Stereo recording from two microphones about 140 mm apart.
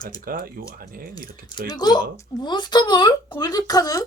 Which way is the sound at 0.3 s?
90° right.